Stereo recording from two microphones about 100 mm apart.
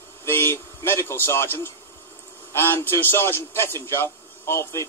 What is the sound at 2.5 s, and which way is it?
A man's voice, 25° left (ahead or behind).